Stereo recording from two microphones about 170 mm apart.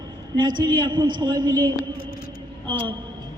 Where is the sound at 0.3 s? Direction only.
25° right (ahead or behind).